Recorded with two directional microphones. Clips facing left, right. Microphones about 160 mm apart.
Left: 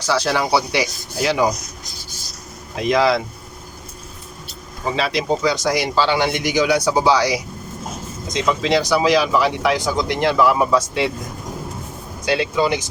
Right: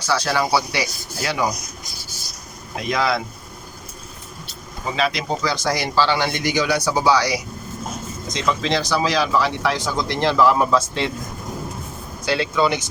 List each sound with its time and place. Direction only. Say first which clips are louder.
0.1 s speech: left 2 dB; 25° left (ahead or behind)
2.8 s speech: left 5 dB; 25° left (ahead or behind)
4.9 s speech: left 2 dB; 25° left (ahead or behind)
12.3 s speech: left 1 dB; 20° left (ahead or behind)